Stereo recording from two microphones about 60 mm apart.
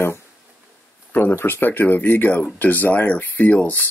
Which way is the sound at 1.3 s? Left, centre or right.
Left.